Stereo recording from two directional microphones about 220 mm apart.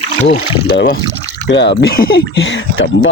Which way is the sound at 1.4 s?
50° left (ahead or behind).